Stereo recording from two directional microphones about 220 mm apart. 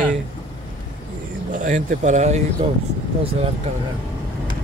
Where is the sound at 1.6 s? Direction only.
35° right (ahead or behind).